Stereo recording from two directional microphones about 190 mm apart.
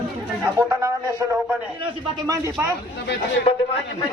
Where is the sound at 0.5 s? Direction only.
15° right (ahead or behind).